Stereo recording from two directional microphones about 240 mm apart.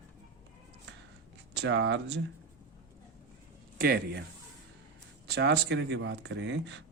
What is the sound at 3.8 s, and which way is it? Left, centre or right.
Speech, right.